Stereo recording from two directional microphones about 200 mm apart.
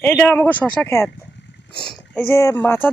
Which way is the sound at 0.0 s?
10° left (ahead or behind).